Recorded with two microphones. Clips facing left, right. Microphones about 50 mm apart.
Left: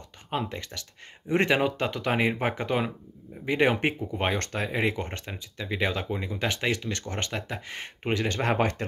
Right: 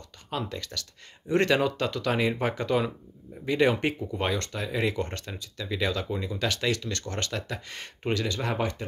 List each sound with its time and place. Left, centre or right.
0.3 s speech: left
4.5 s speech: left
4.7 s speech: left
8.3 s speech: left